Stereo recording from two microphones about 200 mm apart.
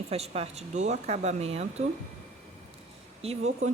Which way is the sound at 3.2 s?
30° right (ahead or behind).